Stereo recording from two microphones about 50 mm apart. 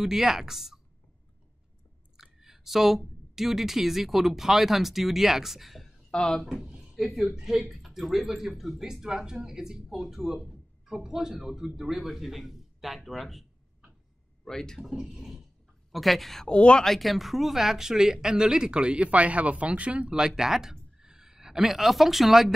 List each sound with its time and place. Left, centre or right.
0.0 s speech: centre
2.4 s a woman's voice: centre
6.0 s speech: centre
6.4 s a woman's voice: centre
14.4 s speech: centre
15.0 s a woman's voice: centre
16.4 s speech: left
16.8 s speech: centre